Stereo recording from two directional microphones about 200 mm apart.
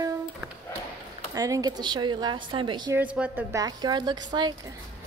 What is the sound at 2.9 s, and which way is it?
A woman's voice, 5° right (ahead or behind).